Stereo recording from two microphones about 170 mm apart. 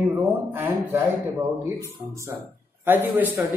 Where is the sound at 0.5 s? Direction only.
10° right (ahead or behind).